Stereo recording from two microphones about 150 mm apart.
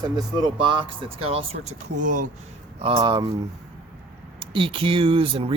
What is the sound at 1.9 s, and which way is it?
Speech, 60° right (ahead or behind).